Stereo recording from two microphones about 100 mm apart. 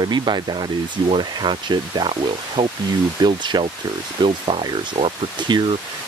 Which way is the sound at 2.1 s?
65° right (ahead or behind).